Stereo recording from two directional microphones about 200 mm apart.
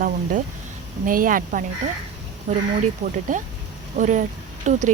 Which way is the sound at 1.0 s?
45° right (ahead or behind).